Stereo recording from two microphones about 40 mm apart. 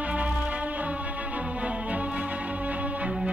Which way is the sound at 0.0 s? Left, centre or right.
Right.